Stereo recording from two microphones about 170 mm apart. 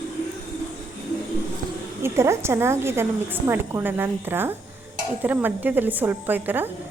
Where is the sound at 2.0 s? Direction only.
15° right (ahead or behind).